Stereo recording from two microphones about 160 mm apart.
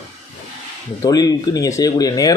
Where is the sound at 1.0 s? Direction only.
25° left (ahead or behind).